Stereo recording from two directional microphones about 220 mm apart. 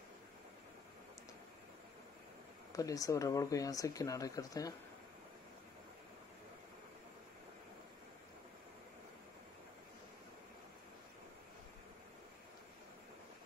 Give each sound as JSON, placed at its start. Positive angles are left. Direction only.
{"t": 2.7, "sound": "speech", "side_deg": 15}